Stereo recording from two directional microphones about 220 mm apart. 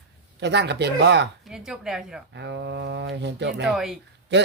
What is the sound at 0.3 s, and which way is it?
Speech, 50° right (ahead or behind).